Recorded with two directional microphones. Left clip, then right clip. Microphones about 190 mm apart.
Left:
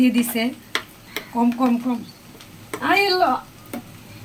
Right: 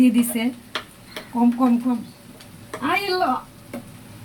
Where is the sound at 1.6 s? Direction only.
10° right (ahead or behind).